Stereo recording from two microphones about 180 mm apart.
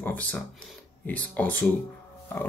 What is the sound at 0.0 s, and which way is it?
Speech, 10° left (ahead or behind).